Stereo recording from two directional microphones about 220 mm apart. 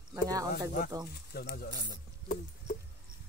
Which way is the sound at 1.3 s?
45° left (ahead or behind).